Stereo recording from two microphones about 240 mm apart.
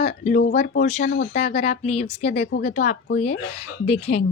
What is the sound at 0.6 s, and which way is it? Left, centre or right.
Speech, left.